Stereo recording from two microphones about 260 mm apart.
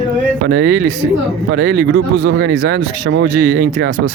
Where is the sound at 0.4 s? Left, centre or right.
Right.